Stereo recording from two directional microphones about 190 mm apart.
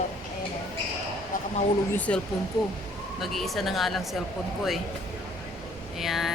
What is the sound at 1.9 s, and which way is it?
Speech, 5° left (ahead or behind).